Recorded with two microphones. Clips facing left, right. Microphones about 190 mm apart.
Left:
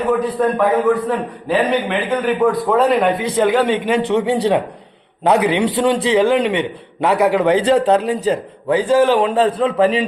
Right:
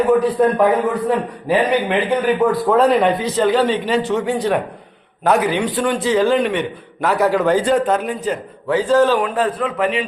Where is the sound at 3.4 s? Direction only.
10° left (ahead or behind).